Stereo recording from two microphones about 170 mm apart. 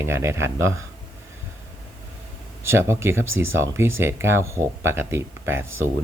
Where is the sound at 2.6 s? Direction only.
15° right (ahead or behind).